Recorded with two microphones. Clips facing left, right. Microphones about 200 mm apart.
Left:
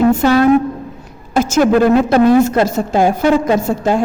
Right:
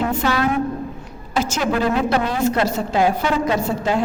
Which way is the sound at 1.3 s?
45° left (ahead or behind).